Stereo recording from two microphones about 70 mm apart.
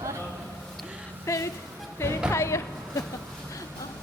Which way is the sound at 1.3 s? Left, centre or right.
Left.